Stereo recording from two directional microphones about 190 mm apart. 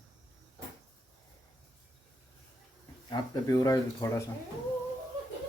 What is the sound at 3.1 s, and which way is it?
Speech, 20° left (ahead or behind).